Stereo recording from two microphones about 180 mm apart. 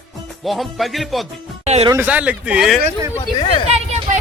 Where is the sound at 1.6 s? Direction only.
35° right (ahead or behind).